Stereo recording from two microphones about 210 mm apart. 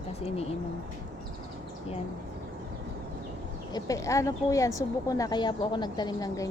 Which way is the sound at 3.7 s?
15° left (ahead or behind).